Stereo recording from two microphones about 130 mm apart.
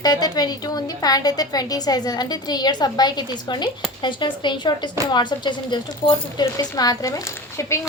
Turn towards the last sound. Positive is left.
turn(degrees=20)  # may be behind; listen again after turning